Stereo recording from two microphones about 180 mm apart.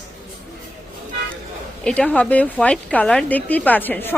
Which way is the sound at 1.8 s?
5° left (ahead or behind).